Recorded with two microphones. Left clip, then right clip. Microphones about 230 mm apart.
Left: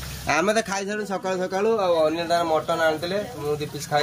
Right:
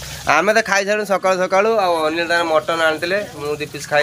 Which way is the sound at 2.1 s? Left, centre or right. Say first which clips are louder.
Right 5 dB; right.